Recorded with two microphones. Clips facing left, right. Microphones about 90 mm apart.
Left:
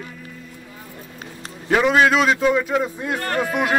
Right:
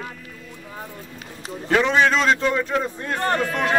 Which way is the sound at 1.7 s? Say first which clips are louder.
Left 2 dB; 10° left (ahead or behind).